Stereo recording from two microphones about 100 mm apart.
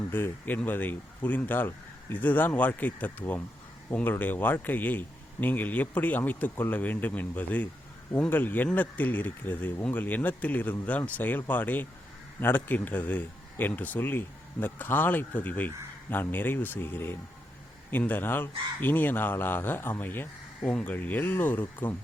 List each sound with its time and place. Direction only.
0.1 s a man's voice: 20° left (ahead or behind)